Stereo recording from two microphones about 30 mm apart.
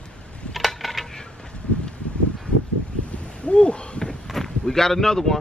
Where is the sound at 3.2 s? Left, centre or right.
Left.